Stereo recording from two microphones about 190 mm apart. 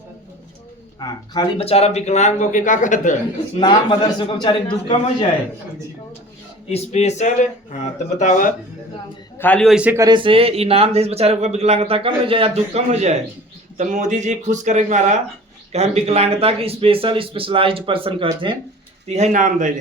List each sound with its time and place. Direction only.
0.9 s speech: 20° left (ahead or behind); by 3.2 s 40° left (ahead or behind)
3.6 s a man's voice: 25° left (ahead or behind)
6.7 s speech: 35° left (ahead or behind)
9.4 s a man's voice: 5° left (ahead or behind); by 18.5 s 25° right (ahead or behind)
19.0 s a man's voice: 35° right (ahead or behind)